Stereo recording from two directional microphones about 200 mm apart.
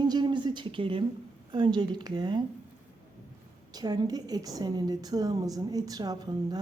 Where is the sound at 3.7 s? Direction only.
20° right (ahead or behind).